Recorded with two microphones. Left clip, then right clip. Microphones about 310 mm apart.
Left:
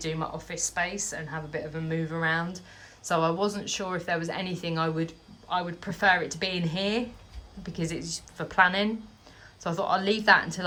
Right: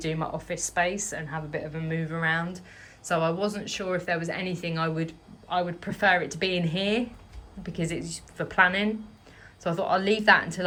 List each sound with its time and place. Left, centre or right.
0.0 s a woman's voice: centre